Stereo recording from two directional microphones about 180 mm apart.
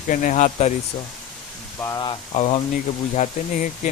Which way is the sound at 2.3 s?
40° left (ahead or behind).